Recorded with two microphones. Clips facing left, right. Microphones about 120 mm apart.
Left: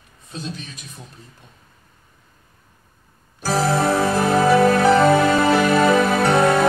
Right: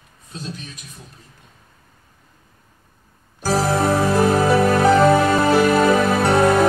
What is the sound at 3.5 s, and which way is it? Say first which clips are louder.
Music: even; 5° right (ahead or behind).